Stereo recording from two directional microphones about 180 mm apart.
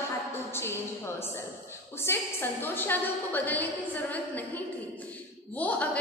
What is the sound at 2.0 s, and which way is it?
A woman's voice, 15° left (ahead or behind).